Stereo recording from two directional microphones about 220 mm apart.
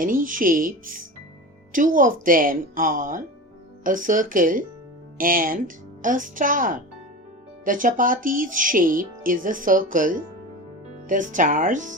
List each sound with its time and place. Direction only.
0.0 s speech: 40° right (ahead or behind)